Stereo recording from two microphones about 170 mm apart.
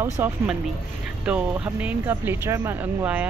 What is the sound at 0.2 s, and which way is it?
Speech, 15° right (ahead or behind).